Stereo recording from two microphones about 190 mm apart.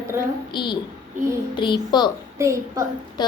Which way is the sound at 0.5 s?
25° left (ahead or behind).